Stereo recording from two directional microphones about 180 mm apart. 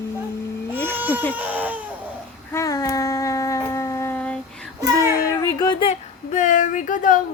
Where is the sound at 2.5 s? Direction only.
20° left (ahead or behind).